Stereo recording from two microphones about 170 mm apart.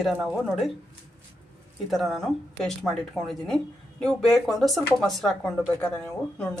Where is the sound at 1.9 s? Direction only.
Centre (ahead or behind).